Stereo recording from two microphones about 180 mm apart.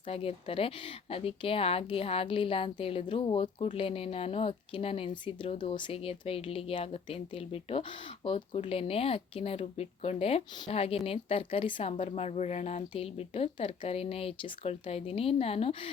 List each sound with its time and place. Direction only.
0.1 s speech: 30° left (ahead or behind)